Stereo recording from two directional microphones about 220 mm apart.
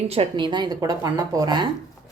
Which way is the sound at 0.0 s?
25° right (ahead or behind).